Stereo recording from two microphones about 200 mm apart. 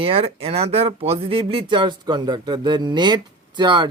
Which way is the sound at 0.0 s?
30° right (ahead or behind).